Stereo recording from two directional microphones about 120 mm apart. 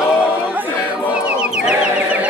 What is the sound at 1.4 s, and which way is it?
Chicken, 10° right (ahead or behind).